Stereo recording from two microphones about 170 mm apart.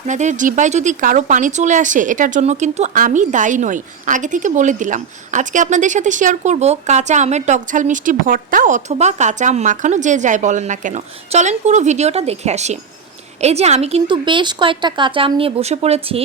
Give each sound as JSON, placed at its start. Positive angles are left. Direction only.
{"t": 0.1, "sound": "a woman's voice", "side_deg": -45}